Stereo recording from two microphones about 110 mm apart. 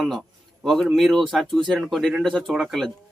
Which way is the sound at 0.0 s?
Centre (ahead or behind).